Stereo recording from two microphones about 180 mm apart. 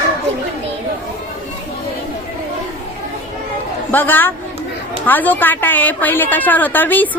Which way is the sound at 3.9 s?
10° left (ahead or behind).